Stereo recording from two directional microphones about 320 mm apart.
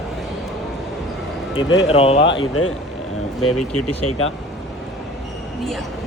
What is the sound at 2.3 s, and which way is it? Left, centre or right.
Speech, left.